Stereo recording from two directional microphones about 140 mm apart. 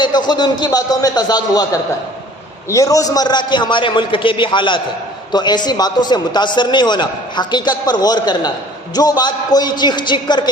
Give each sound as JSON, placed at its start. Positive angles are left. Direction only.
{"t": 0.0, "sound": "a man's voice", "side_deg": 30}